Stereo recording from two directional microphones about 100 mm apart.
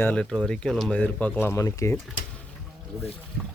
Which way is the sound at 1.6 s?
35° left (ahead or behind).